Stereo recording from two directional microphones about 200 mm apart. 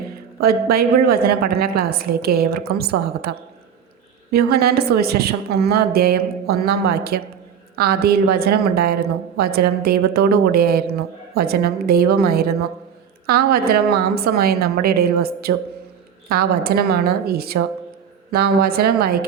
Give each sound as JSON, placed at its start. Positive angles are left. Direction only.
{"t": 0.3, "sound": "a woman's voice", "side_deg": -50}